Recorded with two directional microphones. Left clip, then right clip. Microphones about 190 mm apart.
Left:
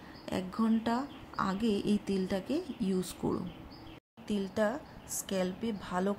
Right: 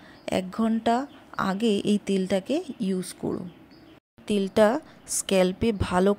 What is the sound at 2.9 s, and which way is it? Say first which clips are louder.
Speech: right 3 dB; 25° right (ahead or behind).